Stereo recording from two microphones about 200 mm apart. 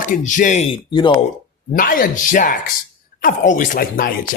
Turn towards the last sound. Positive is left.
turn(degrees=45)  # may be behind; listen again after turning